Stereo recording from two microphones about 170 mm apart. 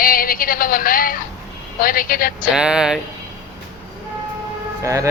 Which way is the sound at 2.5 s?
5° right (ahead or behind).